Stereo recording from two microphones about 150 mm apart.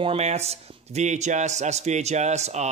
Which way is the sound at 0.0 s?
45° right (ahead or behind).